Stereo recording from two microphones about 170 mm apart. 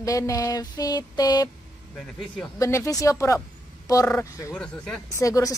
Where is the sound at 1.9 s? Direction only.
5° left (ahead or behind).